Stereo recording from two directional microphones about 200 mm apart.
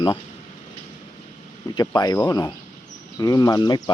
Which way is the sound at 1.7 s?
20° left (ahead or behind).